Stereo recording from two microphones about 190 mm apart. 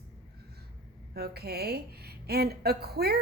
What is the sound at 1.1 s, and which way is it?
A woman's voice, 55° right (ahead or behind).